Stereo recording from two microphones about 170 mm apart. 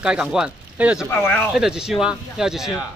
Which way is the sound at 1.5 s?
5° right (ahead or behind).